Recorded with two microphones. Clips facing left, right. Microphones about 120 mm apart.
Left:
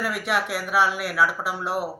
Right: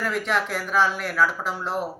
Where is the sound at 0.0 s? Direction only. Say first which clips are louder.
Even; 10° left (ahead or behind).